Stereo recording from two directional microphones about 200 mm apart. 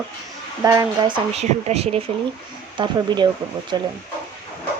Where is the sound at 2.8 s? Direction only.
20° right (ahead or behind).